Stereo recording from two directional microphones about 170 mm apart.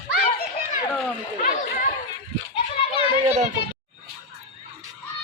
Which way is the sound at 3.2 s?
40° right (ahead or behind).